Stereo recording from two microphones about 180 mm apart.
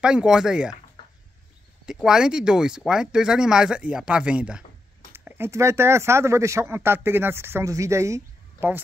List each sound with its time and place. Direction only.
0.0 s speech: 5° right (ahead or behind)
1.9 s speech: 5° right (ahead or behind)